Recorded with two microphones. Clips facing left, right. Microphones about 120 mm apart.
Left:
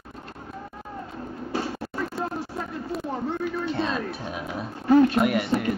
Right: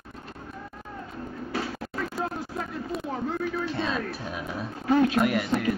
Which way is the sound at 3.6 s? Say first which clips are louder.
Left 2 dB; centre (ahead or behind).